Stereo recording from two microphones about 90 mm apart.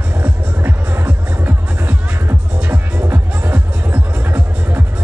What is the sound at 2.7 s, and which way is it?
Music, 20° right (ahead or behind).